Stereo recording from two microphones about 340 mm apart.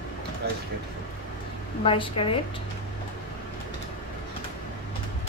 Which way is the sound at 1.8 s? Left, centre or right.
Centre.